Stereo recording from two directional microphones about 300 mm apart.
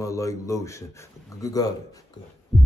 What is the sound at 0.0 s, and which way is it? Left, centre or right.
A man's voice, centre.